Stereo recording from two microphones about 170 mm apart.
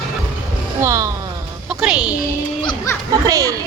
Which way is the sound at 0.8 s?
20° right (ahead or behind).